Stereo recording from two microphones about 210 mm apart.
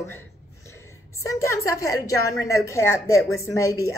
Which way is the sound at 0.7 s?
15° left (ahead or behind).